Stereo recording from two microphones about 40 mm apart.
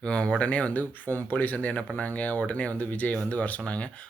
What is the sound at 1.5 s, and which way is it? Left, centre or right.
Speech, left.